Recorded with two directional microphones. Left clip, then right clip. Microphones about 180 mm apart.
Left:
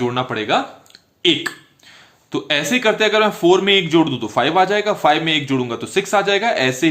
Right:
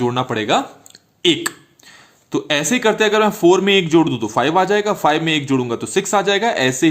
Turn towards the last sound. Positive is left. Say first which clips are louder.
# right 1 dB
turn(degrees=-20)  # may be behind; listen again after turning